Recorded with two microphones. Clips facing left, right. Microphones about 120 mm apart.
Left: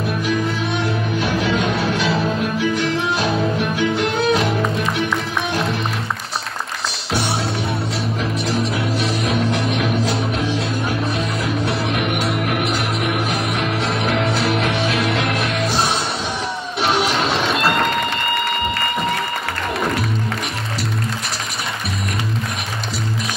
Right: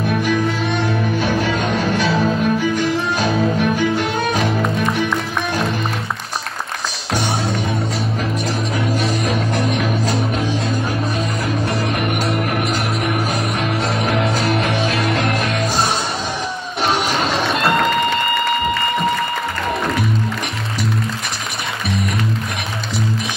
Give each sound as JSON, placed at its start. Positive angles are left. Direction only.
{"t": 1.2, "sound": "music", "side_deg": -45}
{"t": 3.7, "sound": "violin", "side_deg": -45}
{"t": 8.5, "sound": "music", "side_deg": -45}
{"t": 16.8, "sound": "music", "side_deg": -45}